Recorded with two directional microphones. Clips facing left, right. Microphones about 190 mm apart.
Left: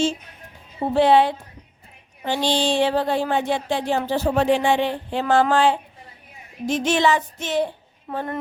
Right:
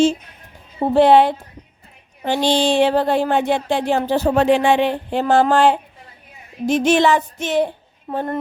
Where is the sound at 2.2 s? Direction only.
65° right (ahead or behind).